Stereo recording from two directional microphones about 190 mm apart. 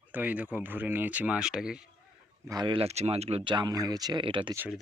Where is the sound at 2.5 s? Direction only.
25° right (ahead or behind).